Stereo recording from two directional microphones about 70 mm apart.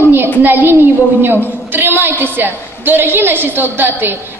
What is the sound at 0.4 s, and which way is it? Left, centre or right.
A woman's voice, right.